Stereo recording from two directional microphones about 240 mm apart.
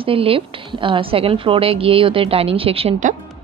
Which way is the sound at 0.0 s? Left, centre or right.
Right.